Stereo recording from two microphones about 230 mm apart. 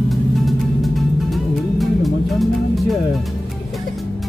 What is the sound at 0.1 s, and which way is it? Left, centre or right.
Music, centre.